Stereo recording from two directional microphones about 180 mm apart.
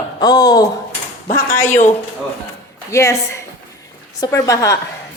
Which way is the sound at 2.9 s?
15° left (ahead or behind).